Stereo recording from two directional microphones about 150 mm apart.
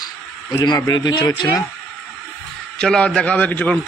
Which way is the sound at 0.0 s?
25° left (ahead or behind).